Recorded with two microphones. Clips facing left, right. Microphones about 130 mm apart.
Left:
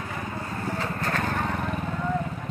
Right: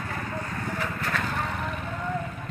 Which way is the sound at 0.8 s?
40° left (ahead or behind).